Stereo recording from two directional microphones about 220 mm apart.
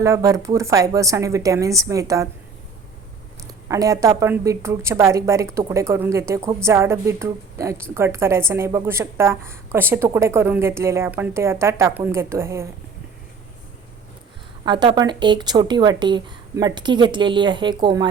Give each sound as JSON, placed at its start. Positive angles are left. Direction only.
{"t": 0.0, "sound": "a woman's voice", "side_deg": -15}
{"t": 3.4, "sound": "a woman's voice", "side_deg": -15}
{"t": 14.6, "sound": "speech", "side_deg": -20}